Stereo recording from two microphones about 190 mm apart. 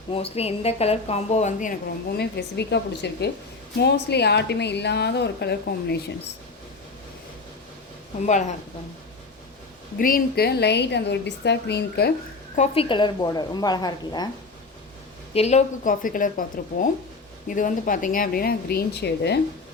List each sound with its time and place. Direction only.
0.1 s speech: 30° left (ahead or behind)
2.1 s a woman's voice: 60° left (ahead or behind)
8.3 s speech: 40° left (ahead or behind)
10.0 s a woman's voice: 50° left (ahead or behind)
12.5 s a woman's voice: 30° left (ahead or behind)
15.3 s speech: 35° left (ahead or behind); by 19.4 s 60° left (ahead or behind)